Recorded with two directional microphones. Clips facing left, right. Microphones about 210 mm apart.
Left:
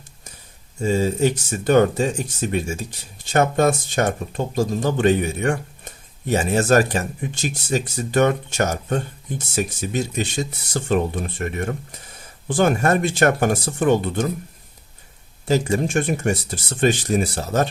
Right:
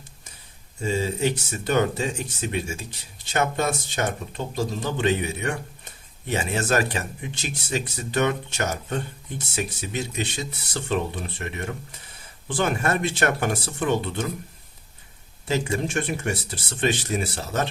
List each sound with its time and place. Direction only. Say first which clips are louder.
0.8 s speech: left 5 dB; 45° left (ahead or behind)
15.4 s speech: left 5 dB; 40° left (ahead or behind)